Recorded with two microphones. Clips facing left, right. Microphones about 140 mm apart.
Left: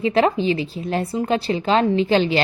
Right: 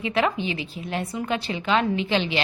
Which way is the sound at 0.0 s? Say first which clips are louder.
Left 6 dB; 35° left (ahead or behind).